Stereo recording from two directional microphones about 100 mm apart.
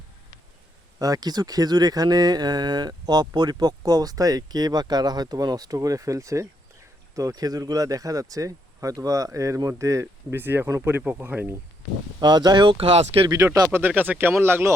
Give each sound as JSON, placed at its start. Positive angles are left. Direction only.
{"t": 0.9, "sound": "speech", "side_deg": -40}
{"t": 10.3, "sound": "speech", "side_deg": -20}
{"t": 12.2, "sound": "speech", "side_deg": -45}
{"t": 12.7, "sound": "speech", "side_deg": -70}
{"t": 13.2, "sound": "speech", "side_deg": -35}
{"t": 13.7, "sound": "speech", "side_deg": -20}